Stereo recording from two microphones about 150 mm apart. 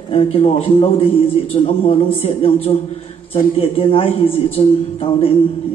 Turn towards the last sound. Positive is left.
turn(degrees=40)  # may be behind; listen again after turning